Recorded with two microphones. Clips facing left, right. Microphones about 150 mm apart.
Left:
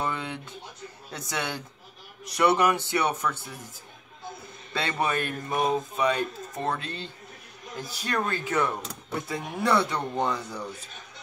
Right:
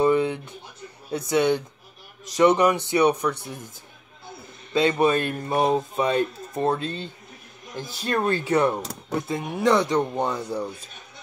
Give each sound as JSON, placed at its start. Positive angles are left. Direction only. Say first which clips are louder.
{"t": 0.0, "sound": "a sound", "louder": "right 11 dB", "side_deg": -15}
{"t": 1.3, "sound": "speech", "louder": "right 12 dB", "side_deg": -20}
{"t": 4.7, "sound": "speech", "louder": "right 8 dB", "side_deg": -20}
{"t": 9.3, "sound": "speech", "louder": "right 4 dB", "side_deg": -20}